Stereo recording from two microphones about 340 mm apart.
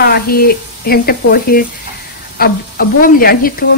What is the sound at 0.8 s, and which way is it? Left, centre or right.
Speech, left.